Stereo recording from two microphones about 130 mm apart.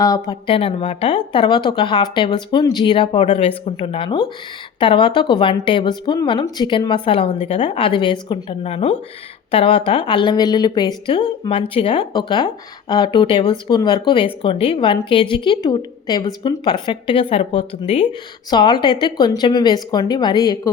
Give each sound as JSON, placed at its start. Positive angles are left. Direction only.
{"t": 0.3, "sound": "speech", "side_deg": 45}
{"t": 8.6, "sound": "speech", "side_deg": 50}
{"t": 18.5, "sound": "speech", "side_deg": 35}